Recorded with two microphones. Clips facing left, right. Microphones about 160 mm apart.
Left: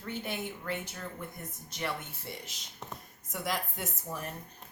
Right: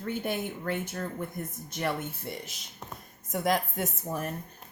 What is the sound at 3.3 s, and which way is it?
Speech, 50° right (ahead or behind).